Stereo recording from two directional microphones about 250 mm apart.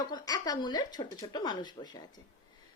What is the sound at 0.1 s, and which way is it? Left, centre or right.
Speech, centre.